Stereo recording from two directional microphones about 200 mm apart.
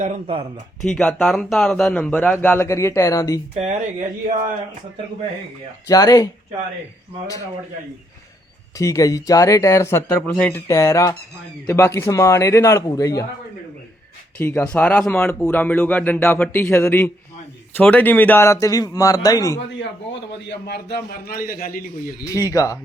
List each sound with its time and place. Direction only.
0.0 s speech: 30° right (ahead or behind)
0.8 s speech: centre (ahead or behind); by 3.4 s 15° left (ahead or behind)
3.5 s speech: 35° right (ahead or behind)
5.9 s speech: 15° left (ahead or behind)
8.8 s speech: 15° left (ahead or behind)
14.3 s speech: 10° left (ahead or behind)
20.7 s a man's voice: 50° left (ahead or behind)
22.3 s speech: 15° left (ahead or behind)